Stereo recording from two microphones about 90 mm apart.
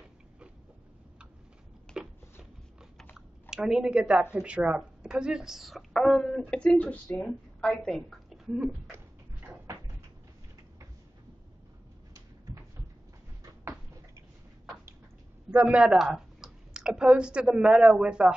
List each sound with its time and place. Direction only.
1.9 s a sound: 10° left (ahead or behind)
3.2 s a woman's voice: 5° right (ahead or behind)
15.5 s a man's voice: 20° right (ahead or behind)
15.8 s speech: 10° right (ahead or behind)